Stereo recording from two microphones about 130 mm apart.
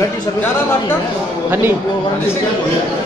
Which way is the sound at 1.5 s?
15° right (ahead or behind).